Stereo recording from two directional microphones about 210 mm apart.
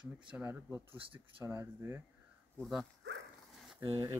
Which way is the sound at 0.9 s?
25° right (ahead or behind).